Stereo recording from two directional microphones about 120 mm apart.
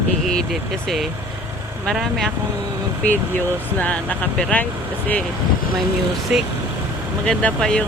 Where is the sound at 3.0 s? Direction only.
15° left (ahead or behind).